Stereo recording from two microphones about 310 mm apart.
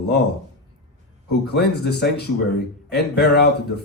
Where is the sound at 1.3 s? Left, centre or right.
Left.